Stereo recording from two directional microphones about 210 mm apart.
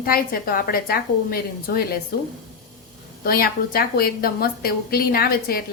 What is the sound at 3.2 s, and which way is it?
A woman's voice, 45° left (ahead or behind).